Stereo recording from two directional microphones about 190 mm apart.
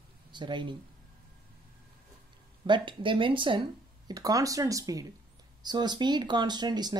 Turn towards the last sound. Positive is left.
turn(degrees=-20)  # may be behind; listen again after turning